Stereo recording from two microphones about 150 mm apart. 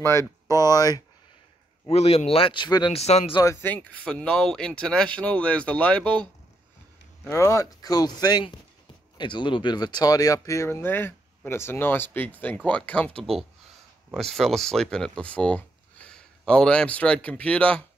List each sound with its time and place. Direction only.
0.0 s speech: 20° left (ahead or behind)
1.9 s speech: 40° left (ahead or behind)
3.0 s speech: 45° left (ahead or behind)
3.6 s speech: 10° left (ahead or behind)
7.2 s speech: 20° left (ahead or behind)